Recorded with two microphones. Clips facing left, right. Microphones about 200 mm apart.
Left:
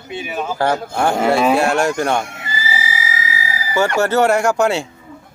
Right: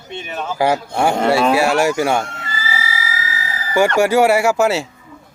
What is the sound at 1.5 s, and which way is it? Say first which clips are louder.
Speech: right 1 dB; 5° right (ahead or behind).